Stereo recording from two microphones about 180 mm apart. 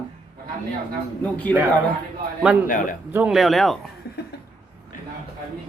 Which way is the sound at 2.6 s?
45° left (ahead or behind).